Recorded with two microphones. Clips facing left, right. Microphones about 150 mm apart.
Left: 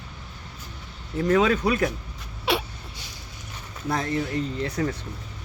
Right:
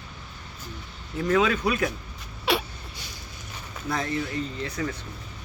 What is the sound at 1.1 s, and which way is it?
Speech, 40° left (ahead or behind).